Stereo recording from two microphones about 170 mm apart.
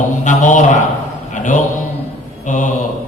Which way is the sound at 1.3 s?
50° left (ahead or behind).